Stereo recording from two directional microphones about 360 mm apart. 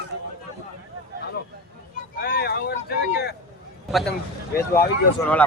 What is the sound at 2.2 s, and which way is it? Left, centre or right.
Vehicle, left.